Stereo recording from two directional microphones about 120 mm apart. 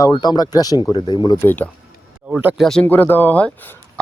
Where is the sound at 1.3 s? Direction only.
20° left (ahead or behind).